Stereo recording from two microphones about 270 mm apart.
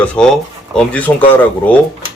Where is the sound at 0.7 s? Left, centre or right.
Centre.